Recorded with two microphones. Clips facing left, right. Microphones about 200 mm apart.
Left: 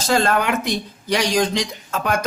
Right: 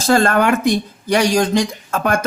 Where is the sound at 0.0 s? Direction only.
50° right (ahead or behind).